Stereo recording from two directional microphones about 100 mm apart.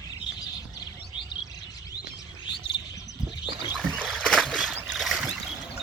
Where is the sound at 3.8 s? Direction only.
5° left (ahead or behind).